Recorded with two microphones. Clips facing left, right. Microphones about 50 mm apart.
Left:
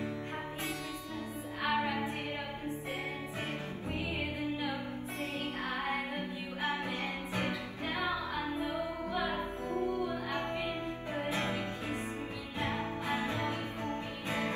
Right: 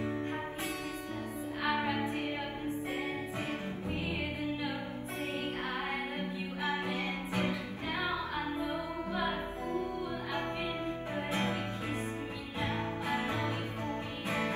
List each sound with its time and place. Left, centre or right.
1.6 s music: right
8.0 s music: right
9.7 s music: left
11.1 s music: right
13.4 s music: left